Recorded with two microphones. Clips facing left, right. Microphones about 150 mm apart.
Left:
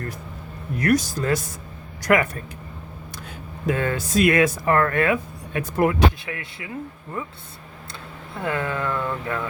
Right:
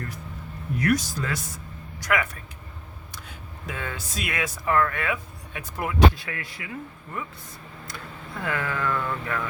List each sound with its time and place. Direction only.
0.8 s speech: 40° left (ahead or behind)
3.7 s speech: 50° left (ahead or behind)
6.1 s speech: 20° left (ahead or behind)